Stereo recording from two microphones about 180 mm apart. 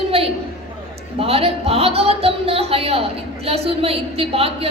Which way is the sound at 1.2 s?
35° right (ahead or behind).